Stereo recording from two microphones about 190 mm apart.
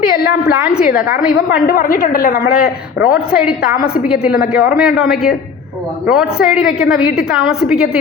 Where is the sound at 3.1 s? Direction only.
5° right (ahead or behind).